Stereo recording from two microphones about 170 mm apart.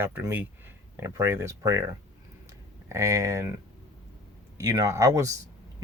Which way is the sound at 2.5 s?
20° right (ahead or behind).